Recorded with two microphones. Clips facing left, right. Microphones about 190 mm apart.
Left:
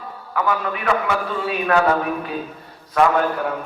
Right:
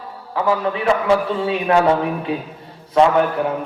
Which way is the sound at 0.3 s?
30° right (ahead or behind).